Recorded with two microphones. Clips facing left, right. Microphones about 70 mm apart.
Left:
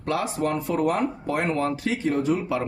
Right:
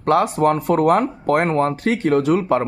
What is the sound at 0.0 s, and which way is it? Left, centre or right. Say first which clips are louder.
Speech: right 9 dB; right.